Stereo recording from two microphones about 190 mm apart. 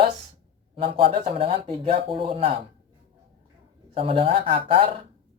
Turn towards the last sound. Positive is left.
turn(degrees=-30)  # may be behind; listen again after turning